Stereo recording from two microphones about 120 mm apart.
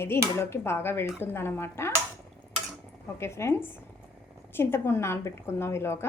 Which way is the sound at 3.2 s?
20° left (ahead or behind).